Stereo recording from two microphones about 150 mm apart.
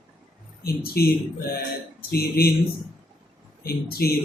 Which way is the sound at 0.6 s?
90° left.